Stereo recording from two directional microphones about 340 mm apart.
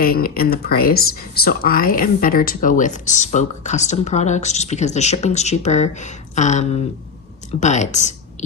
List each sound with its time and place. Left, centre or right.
0.0 s speech: left